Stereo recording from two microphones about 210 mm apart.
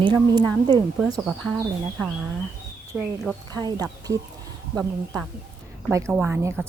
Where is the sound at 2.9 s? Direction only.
5° right (ahead or behind).